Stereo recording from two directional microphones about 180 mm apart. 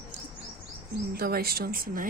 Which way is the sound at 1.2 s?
55° right (ahead or behind).